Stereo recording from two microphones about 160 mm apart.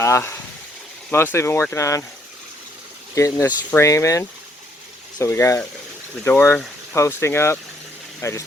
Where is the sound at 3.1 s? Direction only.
20° left (ahead or behind).